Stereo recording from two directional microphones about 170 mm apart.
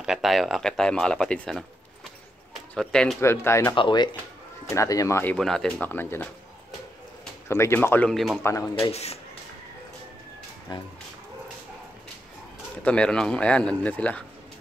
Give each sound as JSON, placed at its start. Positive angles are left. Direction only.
{"t": 0.0, "sound": "speech", "side_deg": 0}
{"t": 2.7, "sound": "speech", "side_deg": 5}
{"t": 3.2, "sound": "speech", "side_deg": 15}
{"t": 3.7, "sound": "speech", "side_deg": 30}
{"t": 7.4, "sound": "speech", "side_deg": 15}
{"t": 8.1, "sound": "speech", "side_deg": 0}
{"t": 8.9, "sound": "speech", "side_deg": 40}
{"t": 10.7, "sound": "speech", "side_deg": 25}
{"t": 12.8, "sound": "speech", "side_deg": 5}